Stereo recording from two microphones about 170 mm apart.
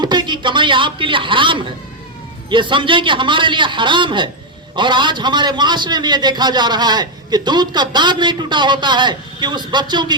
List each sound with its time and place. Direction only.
0.0 s a man's voice: 25° right (ahead or behind)